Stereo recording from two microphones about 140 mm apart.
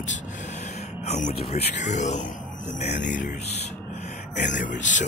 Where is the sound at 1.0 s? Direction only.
55° left (ahead or behind).